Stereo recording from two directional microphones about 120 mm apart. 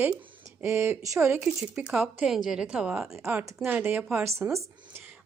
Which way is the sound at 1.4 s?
5° right (ahead or behind).